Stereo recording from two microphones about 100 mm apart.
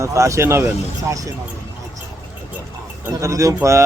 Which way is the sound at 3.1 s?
35° right (ahead or behind).